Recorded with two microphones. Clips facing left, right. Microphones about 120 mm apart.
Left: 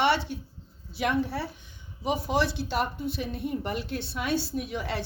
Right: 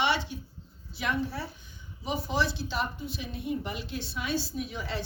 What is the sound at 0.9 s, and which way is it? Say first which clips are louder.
A woman's voice: left 4 dB; 70° left (ahead or behind).